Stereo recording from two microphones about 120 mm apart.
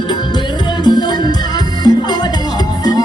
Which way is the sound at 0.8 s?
35° left (ahead or behind).